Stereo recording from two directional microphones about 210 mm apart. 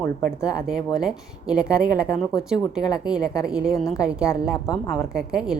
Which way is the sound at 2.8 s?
20° left (ahead or behind).